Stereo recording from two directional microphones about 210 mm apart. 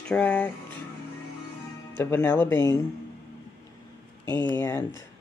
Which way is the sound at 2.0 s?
10° left (ahead or behind).